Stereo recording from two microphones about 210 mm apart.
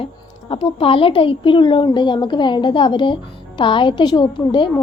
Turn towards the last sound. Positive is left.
turn(degrees=20)  # may be behind; listen again after turning